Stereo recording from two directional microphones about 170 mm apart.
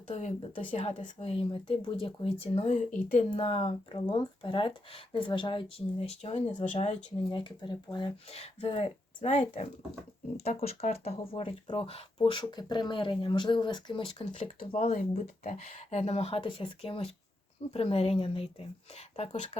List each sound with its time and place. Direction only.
0.1 s speech: 40° left (ahead or behind)
7.3 s speech: 30° left (ahead or behind)